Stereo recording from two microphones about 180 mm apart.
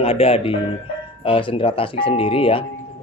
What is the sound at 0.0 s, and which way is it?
Speech, 30° left (ahead or behind).